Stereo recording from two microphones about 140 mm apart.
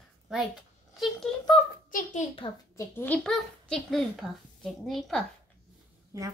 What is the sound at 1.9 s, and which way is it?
Speech, 60° left (ahead or behind).